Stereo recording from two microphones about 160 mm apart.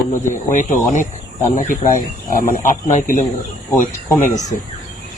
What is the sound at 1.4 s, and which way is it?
Speech, 50° left (ahead or behind).